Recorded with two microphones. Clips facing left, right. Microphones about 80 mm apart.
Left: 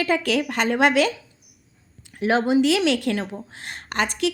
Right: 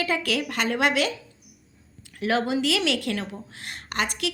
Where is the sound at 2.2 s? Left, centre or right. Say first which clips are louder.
Left 5 dB; left.